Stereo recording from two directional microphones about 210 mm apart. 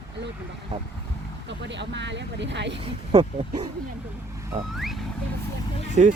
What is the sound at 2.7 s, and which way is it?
Speech, 30° right (ahead or behind).